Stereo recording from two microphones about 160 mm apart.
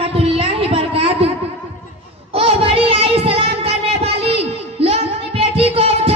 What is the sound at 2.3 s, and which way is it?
Child singing, 35° right (ahead or behind).